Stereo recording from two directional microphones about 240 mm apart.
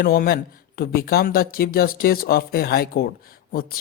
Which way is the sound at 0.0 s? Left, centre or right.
Left.